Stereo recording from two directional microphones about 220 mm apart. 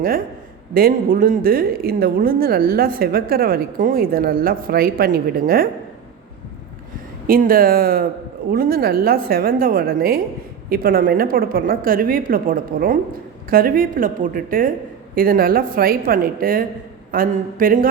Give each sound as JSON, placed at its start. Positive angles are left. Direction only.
{"t": 0.7, "sound": "a woman's voice", "side_deg": -40}
{"t": 7.3, "sound": "a woman's voice", "side_deg": -40}